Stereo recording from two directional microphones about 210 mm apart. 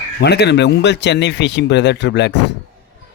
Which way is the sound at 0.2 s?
50° left (ahead or behind).